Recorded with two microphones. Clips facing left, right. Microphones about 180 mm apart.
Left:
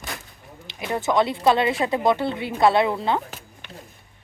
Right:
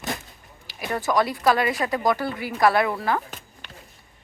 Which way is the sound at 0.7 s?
20° left (ahead or behind).